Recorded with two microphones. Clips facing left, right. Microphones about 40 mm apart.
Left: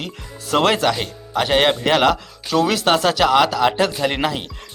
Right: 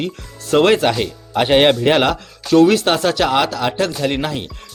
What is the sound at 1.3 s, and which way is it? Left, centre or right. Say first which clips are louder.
Speech: right 4 dB; centre.